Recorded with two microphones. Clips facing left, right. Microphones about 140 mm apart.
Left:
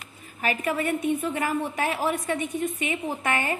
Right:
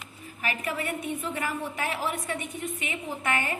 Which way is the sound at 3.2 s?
30° left (ahead or behind).